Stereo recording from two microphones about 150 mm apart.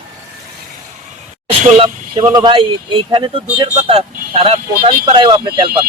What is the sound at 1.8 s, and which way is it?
Speech, 30° right (ahead or behind).